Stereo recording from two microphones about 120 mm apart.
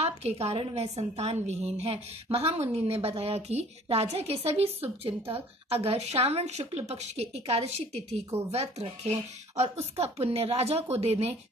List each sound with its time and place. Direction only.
0.0 s a woman's voice: 60° right (ahead or behind)